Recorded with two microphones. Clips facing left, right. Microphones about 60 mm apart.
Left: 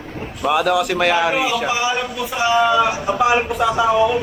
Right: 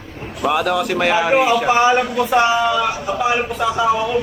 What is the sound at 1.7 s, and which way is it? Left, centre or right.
Speech, right.